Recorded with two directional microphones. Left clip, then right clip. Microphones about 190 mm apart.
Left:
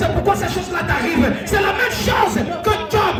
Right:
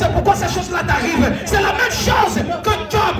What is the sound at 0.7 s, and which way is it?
Speech, 15° right (ahead or behind).